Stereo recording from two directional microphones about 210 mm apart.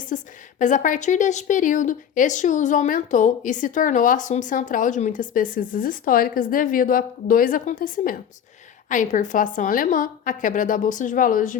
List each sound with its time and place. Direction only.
0.1 s speech: 40° left (ahead or behind)